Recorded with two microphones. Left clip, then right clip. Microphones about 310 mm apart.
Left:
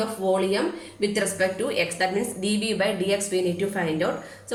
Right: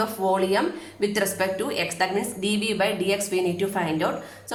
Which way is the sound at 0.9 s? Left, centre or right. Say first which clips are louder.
Even; centre.